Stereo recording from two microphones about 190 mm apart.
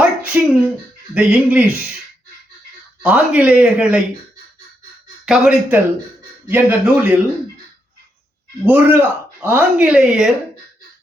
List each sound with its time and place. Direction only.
0.0 s a sound: 5° right (ahead or behind)
1.1 s speech: 5° right (ahead or behind)
3.0 s speech: 5° right (ahead or behind)
5.2 s speech: 5° right (ahead or behind)
8.6 s speech: 10° right (ahead or behind)